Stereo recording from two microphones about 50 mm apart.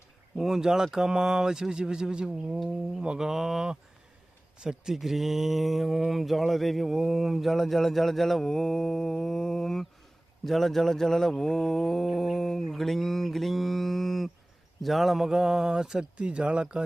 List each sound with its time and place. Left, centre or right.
0.3 s speech: centre
4.9 s a sound: centre
14.8 s speech: centre
16.1 s speech: right